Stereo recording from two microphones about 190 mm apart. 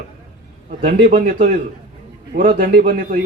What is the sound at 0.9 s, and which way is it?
A man's voice, 50° right (ahead or behind).